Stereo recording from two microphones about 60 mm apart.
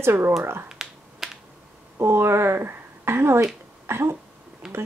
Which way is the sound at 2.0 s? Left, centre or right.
Right.